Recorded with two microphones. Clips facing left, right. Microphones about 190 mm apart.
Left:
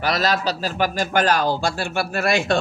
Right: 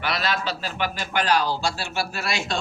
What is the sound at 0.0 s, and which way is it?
A man's voice, 40° left (ahead or behind).